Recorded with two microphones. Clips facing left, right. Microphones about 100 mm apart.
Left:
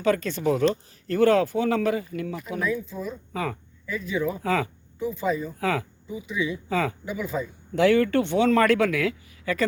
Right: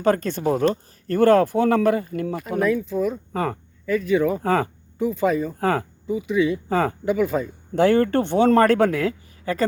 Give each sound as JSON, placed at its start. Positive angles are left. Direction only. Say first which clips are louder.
{"t": 0.0, "sound": "speech", "louder": "right 3 dB", "side_deg": -45}
{"t": 3.3, "sound": "speech", "louder": "right 5 dB", "side_deg": -45}
{"t": 3.8, "sound": "speech", "louder": "right 8 dB", "side_deg": -65}
{"t": 4.4, "sound": "speech", "louder": "right 4 dB", "side_deg": -45}
{"t": 4.9, "sound": "speech", "louder": "right 6 dB", "side_deg": -65}
{"t": 5.5, "sound": "speech", "louder": "right 4 dB", "side_deg": -45}
{"t": 6.1, "sound": "speech", "louder": "right 9 dB", "side_deg": -60}
{"t": 6.7, "sound": "speech", "louder": "right 4 dB", "side_deg": -45}
{"t": 7.0, "sound": "speech", "louder": "right 8 dB", "side_deg": -60}
{"t": 7.7, "sound": "speech", "louder": "right 2 dB", "side_deg": -40}